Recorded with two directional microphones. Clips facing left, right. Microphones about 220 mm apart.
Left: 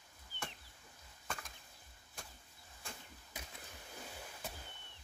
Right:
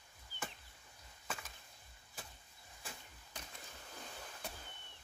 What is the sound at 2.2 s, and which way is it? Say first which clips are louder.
Arrow: even; 5° right (ahead or behind).